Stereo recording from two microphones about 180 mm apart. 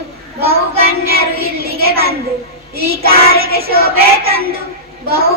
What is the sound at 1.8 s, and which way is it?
Child singing, 60° right (ahead or behind).